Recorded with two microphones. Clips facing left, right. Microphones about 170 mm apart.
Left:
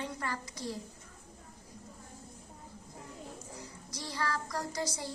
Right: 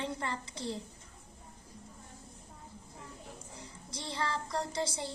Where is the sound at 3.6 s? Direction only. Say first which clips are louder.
Left 1 dB; 25° right (ahead or behind).